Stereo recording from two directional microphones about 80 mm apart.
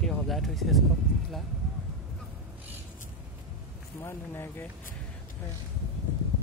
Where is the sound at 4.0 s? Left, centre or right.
Left.